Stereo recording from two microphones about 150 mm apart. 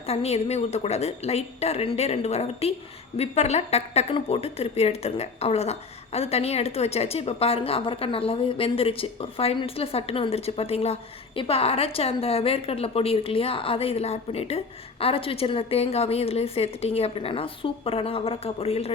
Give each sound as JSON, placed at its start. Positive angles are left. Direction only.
{"t": 0.1, "sound": "a woman's voice", "side_deg": 45}